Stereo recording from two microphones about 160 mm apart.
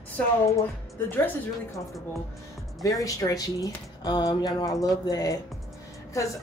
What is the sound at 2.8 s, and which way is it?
Speech, 20° left (ahead or behind).